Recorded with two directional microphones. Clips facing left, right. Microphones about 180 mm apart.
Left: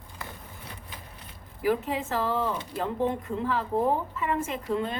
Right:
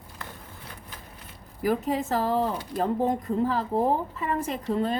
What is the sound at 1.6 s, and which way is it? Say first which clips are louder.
Speech: right 1 dB; 40° right (ahead or behind).